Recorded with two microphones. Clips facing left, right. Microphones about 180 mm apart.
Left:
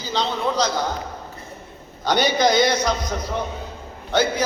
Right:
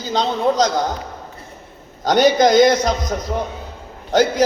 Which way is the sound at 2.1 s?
45° right (ahead or behind).